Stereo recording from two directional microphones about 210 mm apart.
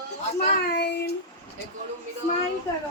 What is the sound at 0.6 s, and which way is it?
Speech, 50° left (ahead or behind).